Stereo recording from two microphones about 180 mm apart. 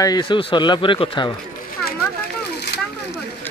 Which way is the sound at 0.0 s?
25° left (ahead or behind).